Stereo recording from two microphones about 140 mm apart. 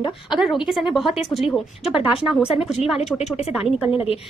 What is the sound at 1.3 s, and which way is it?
Speech, 35° left (ahead or behind).